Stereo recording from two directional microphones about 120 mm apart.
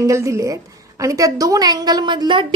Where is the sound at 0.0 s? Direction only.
25° right (ahead or behind).